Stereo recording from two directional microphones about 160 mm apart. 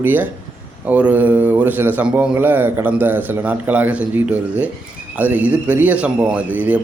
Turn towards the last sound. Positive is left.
turn(degrees=-10)  # may be behind; listen again after turning